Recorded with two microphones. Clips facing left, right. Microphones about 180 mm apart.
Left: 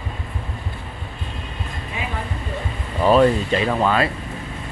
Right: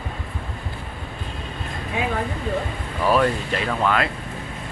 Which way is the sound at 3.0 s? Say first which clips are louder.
Left 5 dB; 20° left (ahead or behind).